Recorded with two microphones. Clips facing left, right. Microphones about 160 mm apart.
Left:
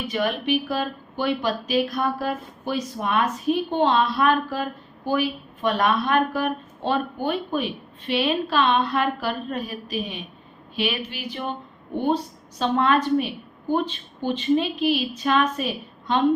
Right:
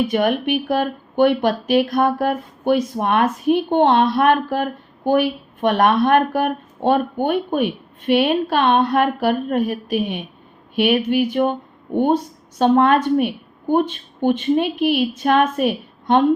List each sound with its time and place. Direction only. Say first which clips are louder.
0.1 s speech: right 5 dB; 55° right (ahead or behind)